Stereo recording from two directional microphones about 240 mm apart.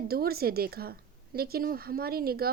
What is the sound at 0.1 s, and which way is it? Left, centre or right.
Speech, right.